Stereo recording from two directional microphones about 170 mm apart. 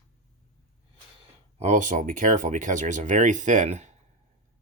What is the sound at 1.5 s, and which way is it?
Speech, 45° right (ahead or behind).